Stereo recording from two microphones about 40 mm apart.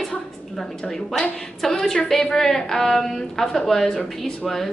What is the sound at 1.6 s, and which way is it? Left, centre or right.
A woman's voice, centre.